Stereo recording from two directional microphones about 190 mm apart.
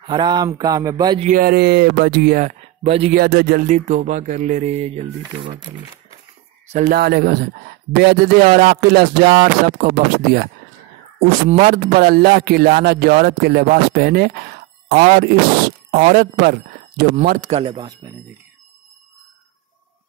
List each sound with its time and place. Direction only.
0.0 s speech: 25° right (ahead or behind)
1.2 s speech: 50° right (ahead or behind)
2.4 s speech: 35° right (ahead or behind)
3.2 s speech: 55° right (ahead or behind); by 5.7 s 30° right (ahead or behind)
6.7 s speech: 45° right (ahead or behind)
11.4 s speech: 40° right (ahead or behind)
15.0 s speech: 40° right (ahead or behind)
16.0 s speech: 55° right (ahead or behind)
17.5 s speech: 30° right (ahead or behind)